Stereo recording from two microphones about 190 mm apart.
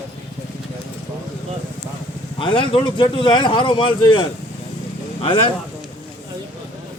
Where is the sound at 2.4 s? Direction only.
25° left (ahead or behind).